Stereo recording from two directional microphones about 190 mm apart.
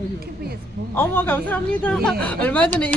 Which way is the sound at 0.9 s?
10° left (ahead or behind).